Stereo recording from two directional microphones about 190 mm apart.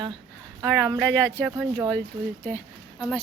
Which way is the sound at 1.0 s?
10° left (ahead or behind).